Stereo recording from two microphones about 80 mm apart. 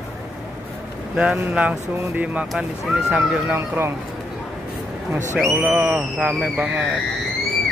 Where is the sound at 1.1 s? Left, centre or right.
Centre.